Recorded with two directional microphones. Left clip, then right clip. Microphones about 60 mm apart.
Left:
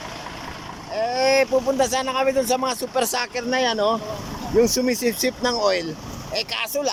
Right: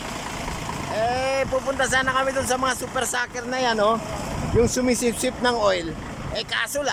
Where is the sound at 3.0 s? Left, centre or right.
Centre.